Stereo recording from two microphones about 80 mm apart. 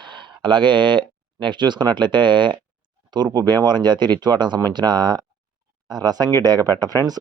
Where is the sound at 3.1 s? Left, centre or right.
Right.